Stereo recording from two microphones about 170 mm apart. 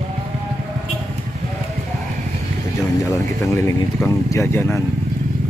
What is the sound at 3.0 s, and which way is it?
Speech, 20° left (ahead or behind).